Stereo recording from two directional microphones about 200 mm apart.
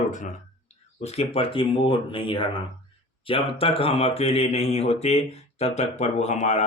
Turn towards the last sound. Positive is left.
turn(degrees=35)  # may be behind; listen again after turning